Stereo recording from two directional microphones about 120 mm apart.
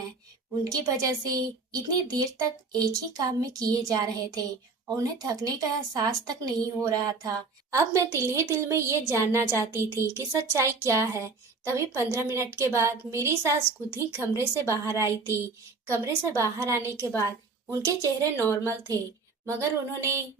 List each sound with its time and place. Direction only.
0.6 s a woman's voice: 30° right (ahead or behind)
19.5 s speech: 25° right (ahead or behind)